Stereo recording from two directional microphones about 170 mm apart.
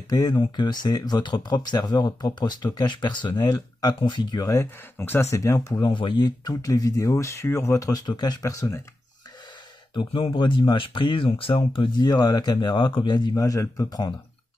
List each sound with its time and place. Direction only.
0.1 s speech: 25° left (ahead or behind)
9.9 s speech: 30° left (ahead or behind)